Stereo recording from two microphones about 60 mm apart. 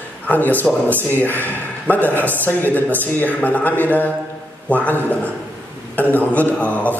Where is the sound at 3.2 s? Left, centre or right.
Left.